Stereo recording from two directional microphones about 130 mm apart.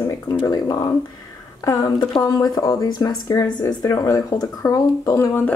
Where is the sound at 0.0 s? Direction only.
25° left (ahead or behind).